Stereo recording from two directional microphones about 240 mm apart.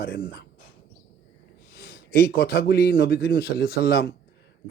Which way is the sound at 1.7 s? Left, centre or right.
Left.